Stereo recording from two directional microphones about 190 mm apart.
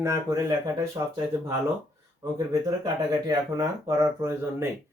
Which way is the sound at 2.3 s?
20° right (ahead or behind).